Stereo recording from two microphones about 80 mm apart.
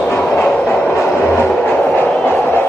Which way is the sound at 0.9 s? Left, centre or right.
Left.